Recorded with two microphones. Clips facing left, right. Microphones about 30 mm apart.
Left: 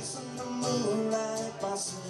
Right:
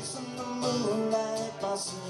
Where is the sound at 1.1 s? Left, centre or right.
Right.